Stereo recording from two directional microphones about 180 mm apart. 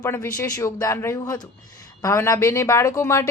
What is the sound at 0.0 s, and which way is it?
A woman's voice, 15° left (ahead or behind).